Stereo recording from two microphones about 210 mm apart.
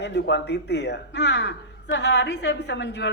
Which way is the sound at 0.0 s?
55° left (ahead or behind).